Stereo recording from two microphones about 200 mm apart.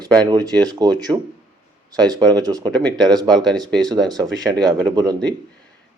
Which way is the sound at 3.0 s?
20° right (ahead or behind).